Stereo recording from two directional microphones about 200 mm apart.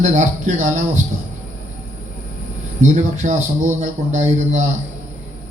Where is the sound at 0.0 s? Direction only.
35° right (ahead or behind).